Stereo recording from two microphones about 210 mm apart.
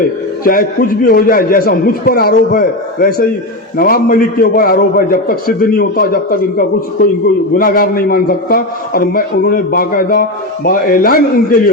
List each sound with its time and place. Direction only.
0.4 s a man's voice: 45° left (ahead or behind)